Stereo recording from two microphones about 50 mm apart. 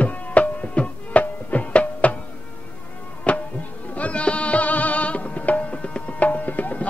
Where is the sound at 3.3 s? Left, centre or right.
Left.